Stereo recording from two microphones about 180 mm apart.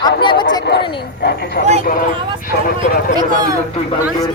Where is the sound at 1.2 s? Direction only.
70° left (ahead or behind).